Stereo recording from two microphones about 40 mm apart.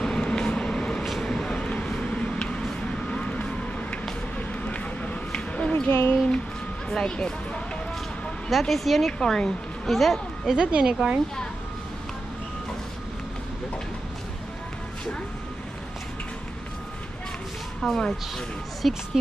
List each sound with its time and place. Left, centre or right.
0.0 s vehicle: centre
4.4 s music: left
5.3 s a sound: left
5.9 s speech: left
6.9 s speech: left
8.5 s speech: centre
9.2 s speech: centre
9.8 s speech: centre
10.5 s speech: right
17.8 s speech: centre